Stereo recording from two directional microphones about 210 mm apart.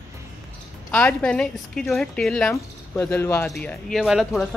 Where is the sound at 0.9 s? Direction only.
10° left (ahead or behind).